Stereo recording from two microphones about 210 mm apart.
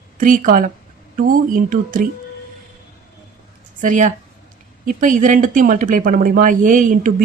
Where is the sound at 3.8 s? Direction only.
35° right (ahead or behind).